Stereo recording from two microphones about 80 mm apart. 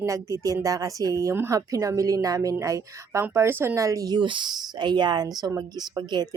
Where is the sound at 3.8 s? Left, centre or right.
Right.